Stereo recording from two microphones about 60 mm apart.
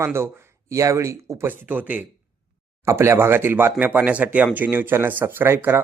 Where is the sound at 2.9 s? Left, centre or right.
Right.